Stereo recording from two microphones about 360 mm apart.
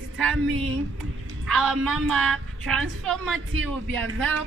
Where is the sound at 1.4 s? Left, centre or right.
Centre.